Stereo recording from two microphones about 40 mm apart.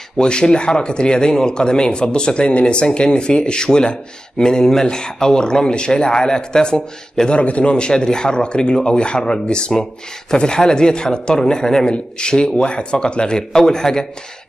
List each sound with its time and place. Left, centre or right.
0.2 s speech: left
7.3 s speech: left; by 14.0 s centre